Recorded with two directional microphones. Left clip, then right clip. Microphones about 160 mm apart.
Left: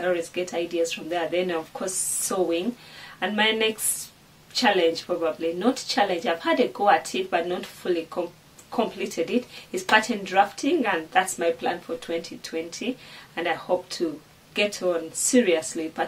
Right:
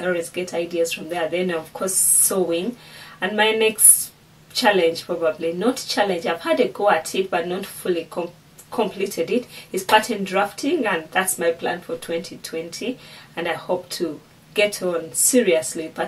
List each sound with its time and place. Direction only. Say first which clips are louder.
0.0 s speech: right 2 dB; 10° left (ahead or behind)
3.2 s speech: right 4 dB; 10° left (ahead or behind)